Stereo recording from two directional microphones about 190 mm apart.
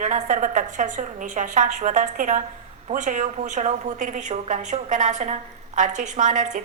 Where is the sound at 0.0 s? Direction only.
40° right (ahead or behind).